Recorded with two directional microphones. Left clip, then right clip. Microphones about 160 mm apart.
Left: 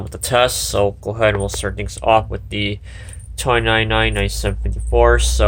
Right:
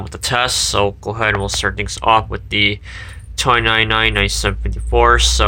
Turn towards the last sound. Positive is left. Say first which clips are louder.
# right 2 dB
turn(degrees=15)  # may be behind; listen again after turning